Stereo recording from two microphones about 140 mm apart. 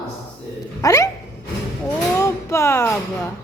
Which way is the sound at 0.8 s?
25° left (ahead or behind).